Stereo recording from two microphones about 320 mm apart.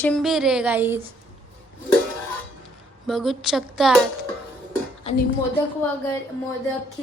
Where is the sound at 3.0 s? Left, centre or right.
Centre.